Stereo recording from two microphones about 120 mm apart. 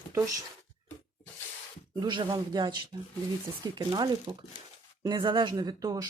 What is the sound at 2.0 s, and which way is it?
Speech, 40° right (ahead or behind).